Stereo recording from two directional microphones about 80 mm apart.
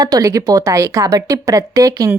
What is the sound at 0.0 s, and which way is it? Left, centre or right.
A woman's voice, right.